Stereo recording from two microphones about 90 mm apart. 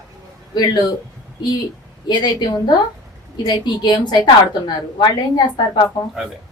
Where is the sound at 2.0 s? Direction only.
55° left (ahead or behind).